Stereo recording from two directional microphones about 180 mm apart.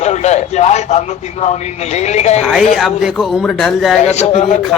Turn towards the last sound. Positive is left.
turn(degrees=40)  # may be behind; listen again after turning